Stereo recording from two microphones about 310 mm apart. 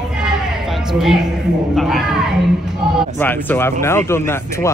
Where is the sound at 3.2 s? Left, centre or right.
Centre.